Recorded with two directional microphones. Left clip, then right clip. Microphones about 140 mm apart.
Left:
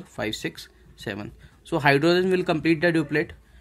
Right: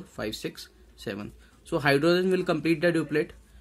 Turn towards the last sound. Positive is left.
turn(degrees=15)  # may be behind; listen again after turning